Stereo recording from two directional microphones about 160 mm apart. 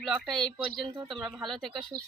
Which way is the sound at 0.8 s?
30° right (ahead or behind).